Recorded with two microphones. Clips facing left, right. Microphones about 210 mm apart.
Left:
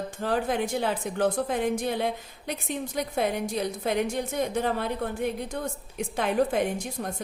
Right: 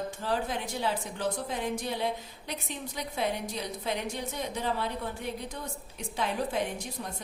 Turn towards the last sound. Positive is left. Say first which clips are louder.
# left 6 dB
turn(degrees=55)  # may be behind; listen again after turning